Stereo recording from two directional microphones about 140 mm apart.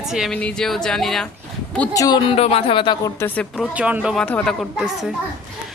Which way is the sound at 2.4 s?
45° left (ahead or behind).